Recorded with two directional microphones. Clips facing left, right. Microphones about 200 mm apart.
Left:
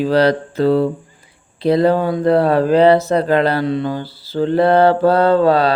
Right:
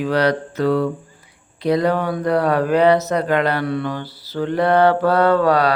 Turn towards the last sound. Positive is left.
turn(degrees=25)  # may be behind; listen again after turning